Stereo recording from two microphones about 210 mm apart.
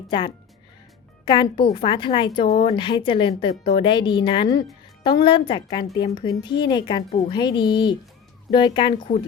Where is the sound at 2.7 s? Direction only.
25° left (ahead or behind).